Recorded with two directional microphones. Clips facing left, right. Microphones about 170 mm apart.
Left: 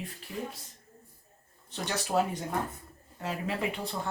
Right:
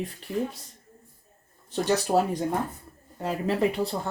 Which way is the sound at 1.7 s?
40° right (ahead or behind).